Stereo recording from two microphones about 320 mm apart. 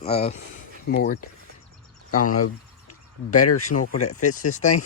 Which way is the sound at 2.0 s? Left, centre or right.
Left.